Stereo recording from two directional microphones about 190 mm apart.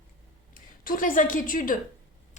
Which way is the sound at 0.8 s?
45° left (ahead or behind).